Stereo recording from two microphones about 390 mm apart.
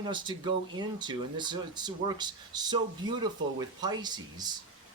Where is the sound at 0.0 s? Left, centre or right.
Centre.